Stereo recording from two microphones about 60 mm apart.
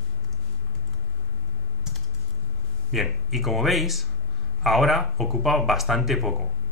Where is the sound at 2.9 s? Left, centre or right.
Centre.